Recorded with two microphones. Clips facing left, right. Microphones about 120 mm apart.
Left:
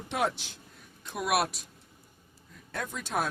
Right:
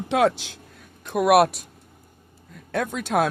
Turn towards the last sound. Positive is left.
turn(degrees=-70)  # may be behind; listen again after turning